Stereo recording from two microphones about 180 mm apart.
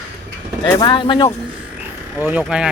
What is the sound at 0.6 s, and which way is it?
Speech, 25° left (ahead or behind).